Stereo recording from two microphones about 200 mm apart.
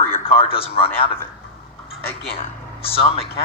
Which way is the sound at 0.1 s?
30° left (ahead or behind).